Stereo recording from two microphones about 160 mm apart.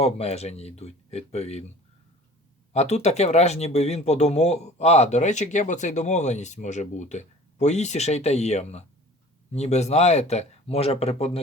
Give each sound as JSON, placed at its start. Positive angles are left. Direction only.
{"t": 0.0, "sound": "speech", "side_deg": 40}
{"t": 2.7, "sound": "speech", "side_deg": 45}